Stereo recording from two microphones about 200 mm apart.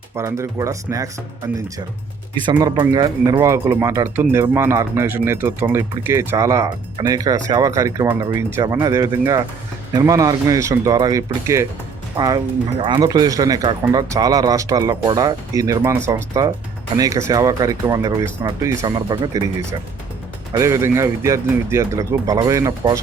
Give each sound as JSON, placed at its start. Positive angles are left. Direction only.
{"t": 0.2, "sound": "speech", "side_deg": -15}
{"t": 2.5, "sound": "speech", "side_deg": -20}
{"t": 20.5, "sound": "speech", "side_deg": -15}